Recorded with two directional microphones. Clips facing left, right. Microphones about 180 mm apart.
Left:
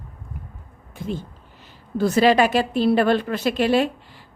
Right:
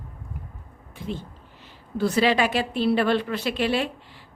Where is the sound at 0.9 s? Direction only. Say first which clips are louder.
Left 4 dB; 45° left (ahead or behind).